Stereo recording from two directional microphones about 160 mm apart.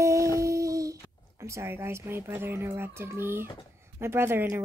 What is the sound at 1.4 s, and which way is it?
A woman's voice, 20° right (ahead or behind).